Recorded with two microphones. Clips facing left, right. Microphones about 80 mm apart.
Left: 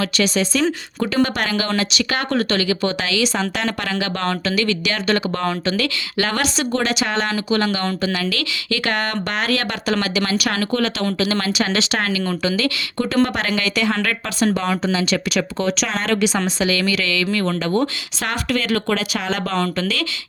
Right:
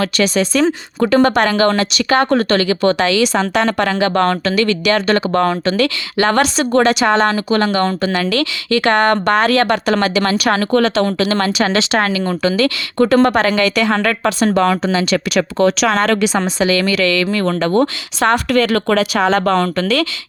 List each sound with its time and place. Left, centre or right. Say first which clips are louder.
0.0 s speech: right 4 dB; right
10.7 s speech: right 7 dB; right
14.5 s speech: right 6 dB; right
16.6 s speech: right 8 dB; right